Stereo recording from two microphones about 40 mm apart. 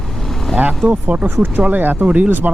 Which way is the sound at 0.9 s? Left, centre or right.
Right.